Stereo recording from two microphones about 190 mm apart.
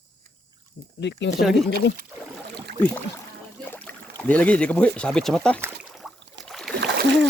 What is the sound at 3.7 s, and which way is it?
Speech, 10° left (ahead or behind).